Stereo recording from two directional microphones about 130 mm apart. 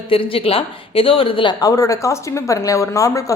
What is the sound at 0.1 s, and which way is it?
A woman's voice, 45° left (ahead or behind).